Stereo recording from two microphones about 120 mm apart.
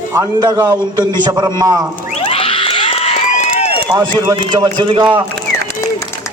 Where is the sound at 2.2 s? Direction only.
50° left (ahead or behind).